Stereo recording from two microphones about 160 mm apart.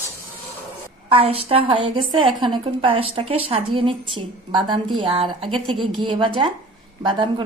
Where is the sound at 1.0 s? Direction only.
35° right (ahead or behind).